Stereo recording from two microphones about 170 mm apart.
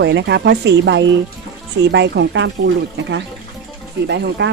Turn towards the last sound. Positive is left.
turn(degrees=-90)